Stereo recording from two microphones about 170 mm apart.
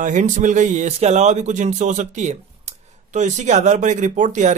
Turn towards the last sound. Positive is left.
turn(degrees=-45)  # may be behind; listen again after turning